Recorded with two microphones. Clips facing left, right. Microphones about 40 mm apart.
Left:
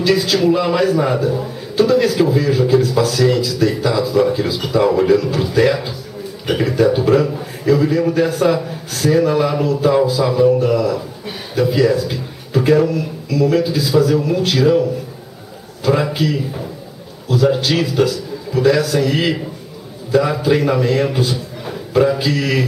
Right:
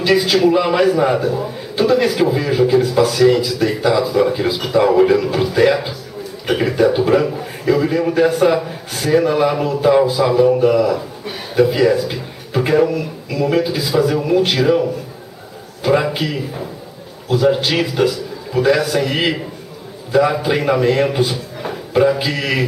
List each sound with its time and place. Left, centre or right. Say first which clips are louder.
0.0 s a man's voice: right 1 dB; centre